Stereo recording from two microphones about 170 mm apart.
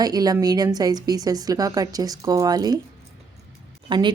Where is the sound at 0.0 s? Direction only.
20° right (ahead or behind).